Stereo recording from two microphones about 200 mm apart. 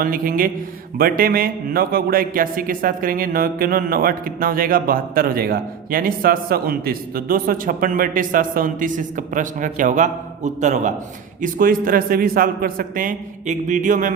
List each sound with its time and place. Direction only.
0.0 s speech: 45° right (ahead or behind)